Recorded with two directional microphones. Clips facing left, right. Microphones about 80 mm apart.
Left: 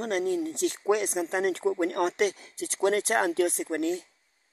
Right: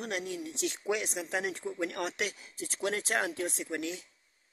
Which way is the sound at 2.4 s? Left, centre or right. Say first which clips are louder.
Left 8 dB; left.